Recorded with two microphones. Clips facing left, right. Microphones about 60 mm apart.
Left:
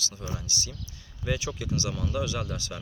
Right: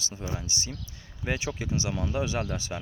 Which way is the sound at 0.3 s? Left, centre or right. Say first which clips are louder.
Right 1 dB; right.